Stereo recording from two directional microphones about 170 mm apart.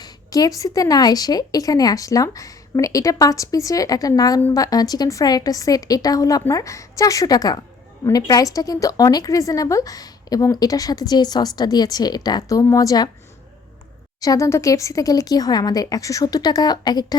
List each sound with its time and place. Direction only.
0.0 s a woman's voice: 20° left (ahead or behind)
14.2 s a woman's voice: 20° left (ahead or behind)